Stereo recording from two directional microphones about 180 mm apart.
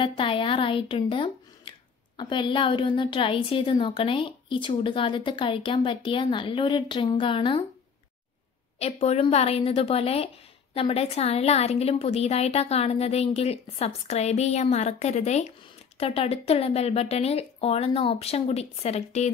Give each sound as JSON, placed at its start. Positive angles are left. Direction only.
{"t": 0.0, "sound": "a woman's voice", "side_deg": 25}
{"t": 9.0, "sound": "a woman's voice", "side_deg": 35}